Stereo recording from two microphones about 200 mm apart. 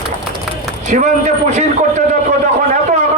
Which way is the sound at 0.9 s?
35° right (ahead or behind).